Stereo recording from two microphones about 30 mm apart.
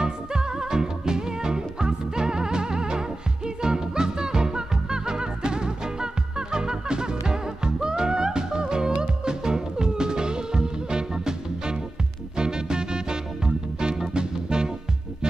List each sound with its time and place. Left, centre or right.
0.0 s music: right